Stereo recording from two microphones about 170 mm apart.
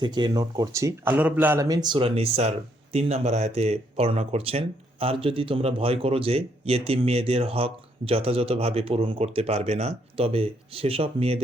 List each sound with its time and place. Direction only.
0.0 s speech: 25° right (ahead or behind)